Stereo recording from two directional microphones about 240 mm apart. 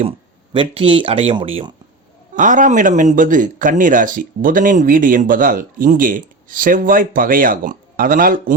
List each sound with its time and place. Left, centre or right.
0.5 s speech: right
2.3 s speech: right